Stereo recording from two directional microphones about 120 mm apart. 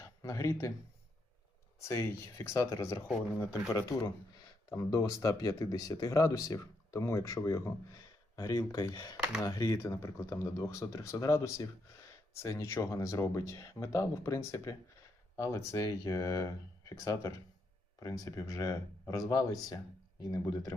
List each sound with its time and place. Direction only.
0.0 s speech: 30° left (ahead or behind)
1.8 s speech: 25° left (ahead or behind)
9.1 s speech: 10° right (ahead or behind)
9.5 s speech: 30° left (ahead or behind)